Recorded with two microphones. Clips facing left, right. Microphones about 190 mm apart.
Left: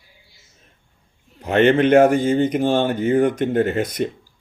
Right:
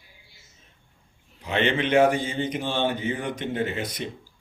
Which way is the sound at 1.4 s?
50° left (ahead or behind).